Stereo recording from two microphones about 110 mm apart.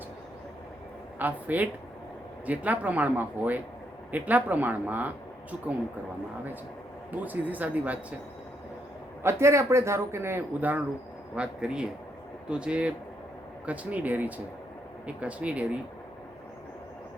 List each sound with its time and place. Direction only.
1.2 s speech: 15° right (ahead or behind)
7.2 s speech: 15° right (ahead or behind)
9.2 s speech: 25° right (ahead or behind)